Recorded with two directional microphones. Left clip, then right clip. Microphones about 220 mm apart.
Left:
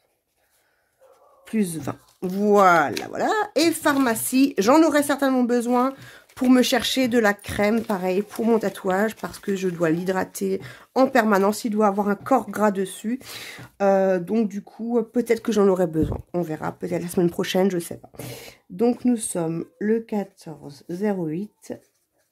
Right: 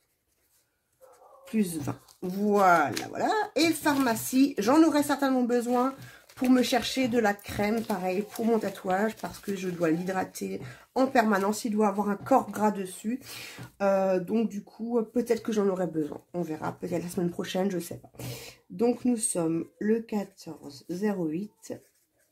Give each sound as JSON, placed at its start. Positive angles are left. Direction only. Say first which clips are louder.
{"t": 1.4, "sound": "speech", "louder": "left 4 dB", "side_deg": 40}